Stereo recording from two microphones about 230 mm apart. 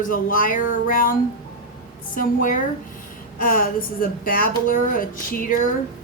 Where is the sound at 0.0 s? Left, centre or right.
Left.